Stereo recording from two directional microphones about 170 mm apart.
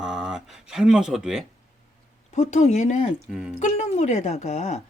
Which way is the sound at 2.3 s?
40° left (ahead or behind).